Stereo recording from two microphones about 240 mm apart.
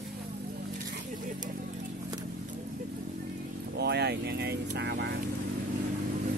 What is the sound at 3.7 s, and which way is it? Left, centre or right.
Vehicle, right.